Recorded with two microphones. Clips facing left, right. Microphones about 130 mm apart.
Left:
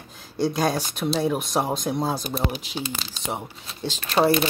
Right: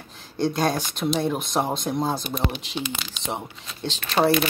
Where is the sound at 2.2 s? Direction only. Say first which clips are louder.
Even; 40° left (ahead or behind).